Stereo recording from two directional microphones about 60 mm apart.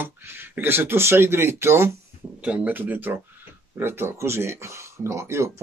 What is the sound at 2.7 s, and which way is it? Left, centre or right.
Speech, right.